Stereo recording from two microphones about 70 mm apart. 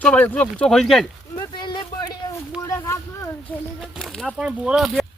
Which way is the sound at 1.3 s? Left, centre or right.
Left.